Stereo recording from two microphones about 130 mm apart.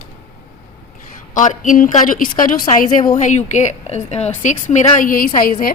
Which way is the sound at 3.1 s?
70° left (ahead or behind).